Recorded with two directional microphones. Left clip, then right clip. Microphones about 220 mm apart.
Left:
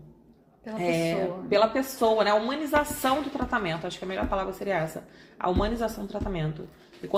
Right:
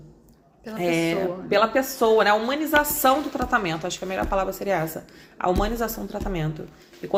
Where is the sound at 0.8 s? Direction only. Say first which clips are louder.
Right 3 dB; 25° right (ahead or behind).